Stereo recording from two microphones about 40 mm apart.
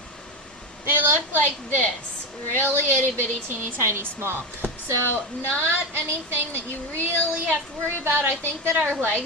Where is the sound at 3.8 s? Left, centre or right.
Right.